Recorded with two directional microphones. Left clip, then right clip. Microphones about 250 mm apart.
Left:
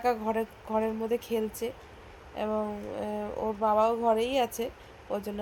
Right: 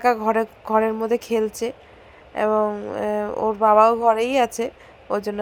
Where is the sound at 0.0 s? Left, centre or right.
Right.